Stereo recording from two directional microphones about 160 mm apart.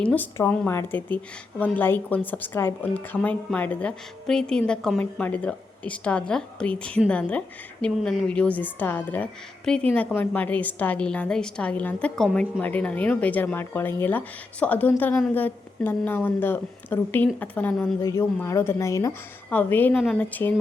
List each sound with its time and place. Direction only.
0.0 s a woman's voice: 10° left (ahead or behind)
20.0 s speech: centre (ahead or behind)